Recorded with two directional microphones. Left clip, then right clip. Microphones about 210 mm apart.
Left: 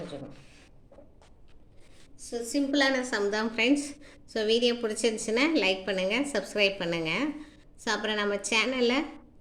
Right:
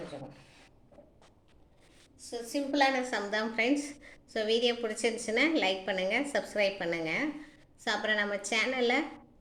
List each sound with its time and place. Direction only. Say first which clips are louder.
2.3 s a woman's voice: left 4 dB; 50° left (ahead or behind)